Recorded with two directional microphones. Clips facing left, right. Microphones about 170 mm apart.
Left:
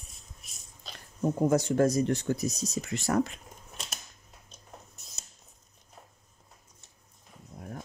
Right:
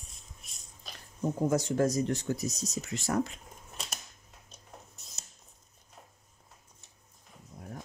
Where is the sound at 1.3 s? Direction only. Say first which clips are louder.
Left 3 dB; 60° left (ahead or behind).